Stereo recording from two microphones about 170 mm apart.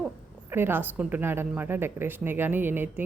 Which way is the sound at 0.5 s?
10° right (ahead or behind).